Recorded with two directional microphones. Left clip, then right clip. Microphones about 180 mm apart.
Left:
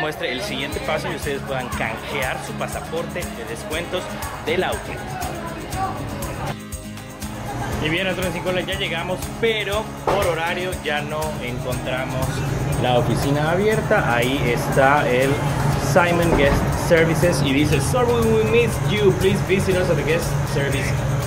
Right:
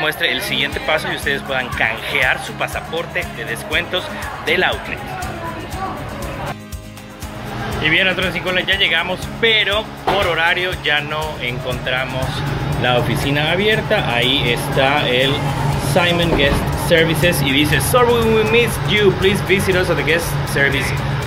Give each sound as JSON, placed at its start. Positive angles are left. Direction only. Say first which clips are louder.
{"t": 0.0, "sound": "speech", "louder": "right 6 dB", "side_deg": 5}
{"t": 4.5, "sound": "speech", "louder": "right 6 dB", "side_deg": 5}
{"t": 7.8, "sound": "speech", "louder": "right 8 dB", "side_deg": 0}
{"t": 13.1, "sound": "speech", "louder": "right 3 dB", "side_deg": -20}
{"t": 17.4, "sound": "speech", "louder": "right 4 dB", "side_deg": 0}